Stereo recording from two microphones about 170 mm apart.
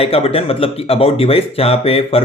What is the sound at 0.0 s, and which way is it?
Speech, 35° left (ahead or behind).